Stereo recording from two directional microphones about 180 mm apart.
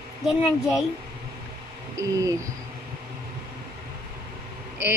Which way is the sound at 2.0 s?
20° right (ahead or behind).